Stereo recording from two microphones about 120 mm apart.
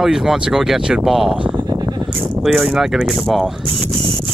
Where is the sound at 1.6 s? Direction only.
35° right (ahead or behind).